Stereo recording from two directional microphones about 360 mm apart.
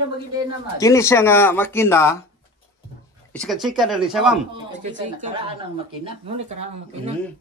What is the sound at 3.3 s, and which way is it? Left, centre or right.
Speech, centre.